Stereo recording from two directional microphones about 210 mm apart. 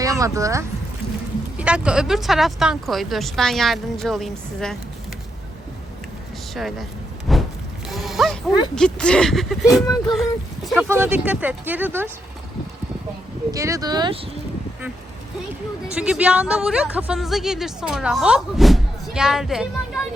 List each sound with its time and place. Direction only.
0.0 s a woman's voice: 15° right (ahead or behind); by 4.8 s centre (ahead or behind)
6.5 s speech: centre (ahead or behind)
7.3 s a sound: centre (ahead or behind)
7.9 s a woman's voice: centre (ahead or behind)
10.7 s speech: 10° right (ahead or behind)
13.5 s speech: 15° right (ahead or behind)
16.0 s a woman's voice: 5° right (ahead or behind)